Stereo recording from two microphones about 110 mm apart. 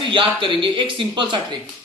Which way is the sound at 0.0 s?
50° right (ahead or behind).